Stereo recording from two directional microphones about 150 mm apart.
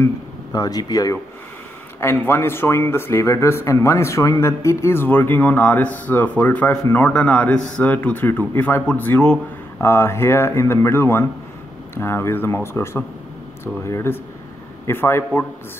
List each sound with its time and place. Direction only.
0.5 s speech: 25° left (ahead or behind)